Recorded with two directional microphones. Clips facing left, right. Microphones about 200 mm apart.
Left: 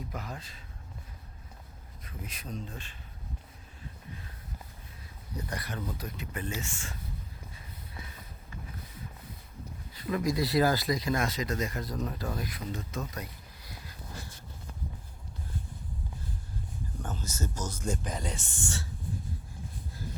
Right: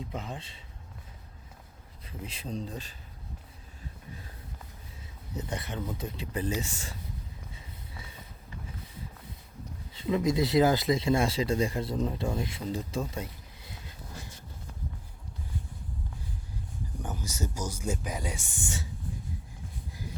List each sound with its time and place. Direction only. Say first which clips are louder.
0.0 s speech: right 2 dB; 25° right (ahead or behind)
2.0 s speech: right 3 dB; 30° right (ahead or behind)
5.3 s speech: right 2 dB; 25° right (ahead or behind)
9.9 s speech: right 3 dB; 25° right (ahead or behind)
17.0 s speech: right 1 dB; 15° right (ahead or behind)